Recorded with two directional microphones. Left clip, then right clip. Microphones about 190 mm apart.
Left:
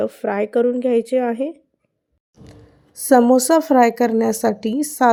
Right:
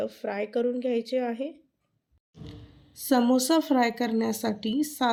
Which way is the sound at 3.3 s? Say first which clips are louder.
Left 10 dB; 40° left (ahead or behind).